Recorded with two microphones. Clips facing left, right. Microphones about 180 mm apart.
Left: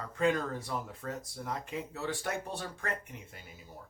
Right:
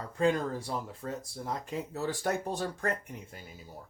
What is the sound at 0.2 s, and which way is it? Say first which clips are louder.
Speech: right 2 dB; 30° right (ahead or behind).